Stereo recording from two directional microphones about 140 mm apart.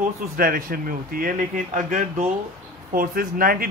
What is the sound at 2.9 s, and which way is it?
Speech, 90° right.